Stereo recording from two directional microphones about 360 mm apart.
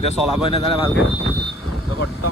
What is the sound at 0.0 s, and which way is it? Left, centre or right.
Speech, centre.